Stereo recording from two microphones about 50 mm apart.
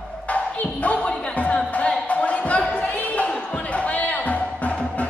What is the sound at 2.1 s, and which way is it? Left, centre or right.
Basketball bounce, left.